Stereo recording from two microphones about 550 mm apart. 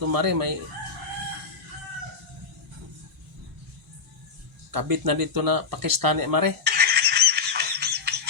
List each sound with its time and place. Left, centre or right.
0.1 s speech: right
4.7 s speech: right
6.7 s music: centre